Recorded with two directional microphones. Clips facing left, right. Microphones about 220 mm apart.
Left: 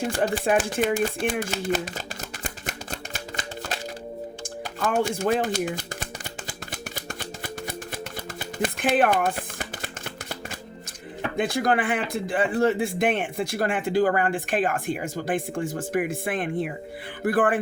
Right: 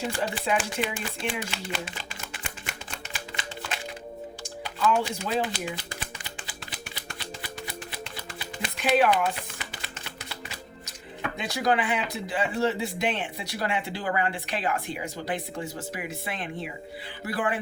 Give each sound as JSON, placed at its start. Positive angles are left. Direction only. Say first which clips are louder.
{"t": 0.0, "sound": "speech", "louder": "left 5 dB", "side_deg": 50}
{"t": 4.4, "sound": "a sound", "louder": "right 2 dB", "side_deg": 50}
{"t": 11.3, "sound": "speech", "louder": "left 3 dB", "side_deg": 50}